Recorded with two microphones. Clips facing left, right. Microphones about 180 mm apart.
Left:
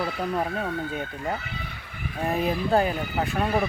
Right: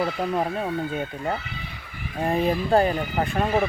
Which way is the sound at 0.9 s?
5° right (ahead or behind).